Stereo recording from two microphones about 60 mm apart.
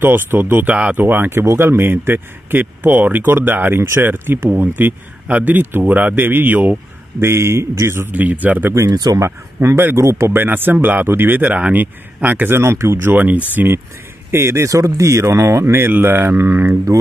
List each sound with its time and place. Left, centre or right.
0.0 s a man's voice: right
0.7 s a man's voice: right
1.0 s a man's voice: right
1.4 s a man's voice: right
7.2 s speech: right
8.1 s a man's voice: right
8.7 s a man's voice: right
12.4 s speech: right
14.3 s speech: right